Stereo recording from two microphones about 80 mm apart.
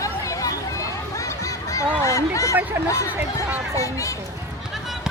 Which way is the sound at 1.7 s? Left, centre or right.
Left.